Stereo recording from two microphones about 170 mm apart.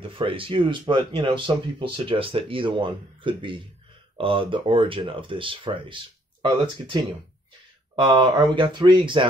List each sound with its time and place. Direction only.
0.0 s speech: 30° right (ahead or behind)